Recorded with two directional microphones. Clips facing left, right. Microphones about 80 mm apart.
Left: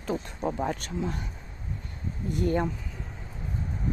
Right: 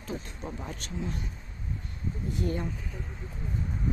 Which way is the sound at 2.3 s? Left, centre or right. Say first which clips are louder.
Left 6 dB; left.